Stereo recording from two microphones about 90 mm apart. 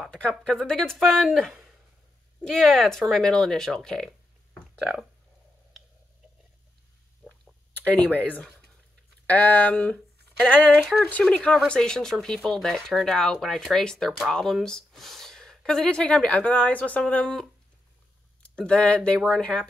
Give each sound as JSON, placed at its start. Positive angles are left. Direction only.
{"t": 0.1, "sound": "speech", "side_deg": 5}
{"t": 7.7, "sound": "a woman's voice", "side_deg": 15}